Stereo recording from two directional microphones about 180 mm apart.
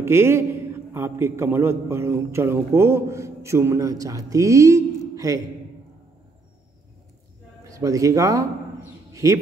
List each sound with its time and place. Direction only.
0.0 s a man's voice: 15° right (ahead or behind)
7.6 s speech: 20° right (ahead or behind)
9.1 s a sound: 15° right (ahead or behind)